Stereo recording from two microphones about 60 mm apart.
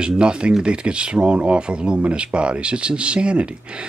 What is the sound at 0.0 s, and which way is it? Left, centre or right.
Speech, centre.